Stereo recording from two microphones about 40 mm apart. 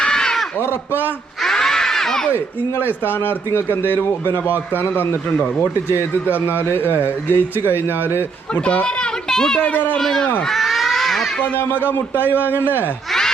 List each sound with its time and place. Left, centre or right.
0.0 s a sound: centre
1.5 s a sound: centre
2.3 s a man's voice: left
8.6 s speech: left
9.3 s speech: centre
9.7 s a man's voice: left
10.0 s speech: centre
10.5 s a sound: centre
11.5 s a man's voice: left